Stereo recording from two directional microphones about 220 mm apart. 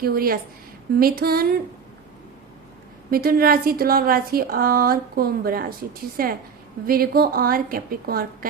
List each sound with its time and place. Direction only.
0.0 s a woman's voice: 45° right (ahead or behind)
3.1 s a woman's voice: 40° right (ahead or behind)